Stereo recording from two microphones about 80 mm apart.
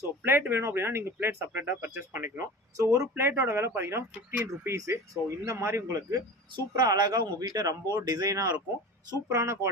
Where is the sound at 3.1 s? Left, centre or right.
Right.